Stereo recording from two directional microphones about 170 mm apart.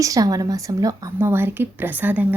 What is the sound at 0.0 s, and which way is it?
Speech, 20° right (ahead or behind).